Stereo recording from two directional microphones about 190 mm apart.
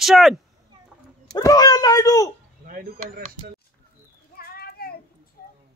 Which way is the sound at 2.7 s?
50° right (ahead or behind).